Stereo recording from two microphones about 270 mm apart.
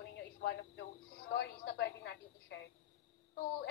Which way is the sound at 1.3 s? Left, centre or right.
Left.